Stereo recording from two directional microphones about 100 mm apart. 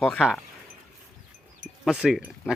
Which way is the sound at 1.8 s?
5° right (ahead or behind).